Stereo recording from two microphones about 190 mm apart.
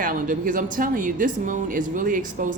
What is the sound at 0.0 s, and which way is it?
Speech, 45° right (ahead or behind).